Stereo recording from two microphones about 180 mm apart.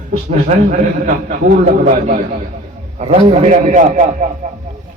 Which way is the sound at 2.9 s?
35° right (ahead or behind).